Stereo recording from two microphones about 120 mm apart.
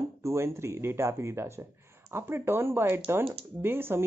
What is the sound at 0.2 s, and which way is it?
Speech, 25° right (ahead or behind).